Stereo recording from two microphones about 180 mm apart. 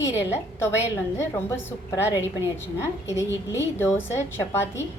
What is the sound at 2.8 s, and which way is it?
A woman's voice, 15° left (ahead or behind).